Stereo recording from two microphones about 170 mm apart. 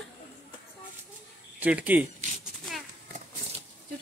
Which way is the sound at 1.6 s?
10° right (ahead or behind).